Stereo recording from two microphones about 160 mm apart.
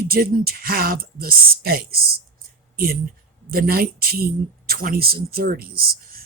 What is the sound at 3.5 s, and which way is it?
Speech, 70° right (ahead or behind).